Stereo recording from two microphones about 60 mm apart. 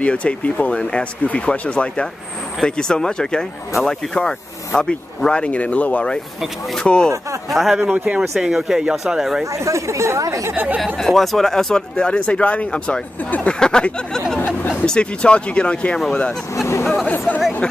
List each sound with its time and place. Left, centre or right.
0.0 s speech: centre
6.8 s speech: centre
7.4 s speech: centre
7.8 s speech: right
8.4 s speech: centre
9.5 s speech: right
10.5 s speech: right
11.0 s speech: centre; by 13.6 s left
13.6 s speech: centre
16.5 s speech: left